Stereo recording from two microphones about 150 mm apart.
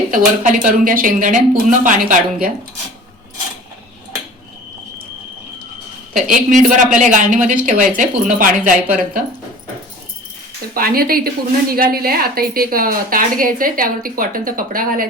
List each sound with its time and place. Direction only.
0.1 s speech: 60° right (ahead or behind)
6.1 s speech: 60° right (ahead or behind)
10.8 s a woman's voice: 85° right